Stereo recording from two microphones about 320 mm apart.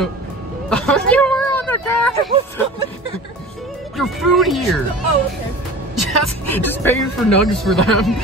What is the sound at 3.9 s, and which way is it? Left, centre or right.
Speech, centre.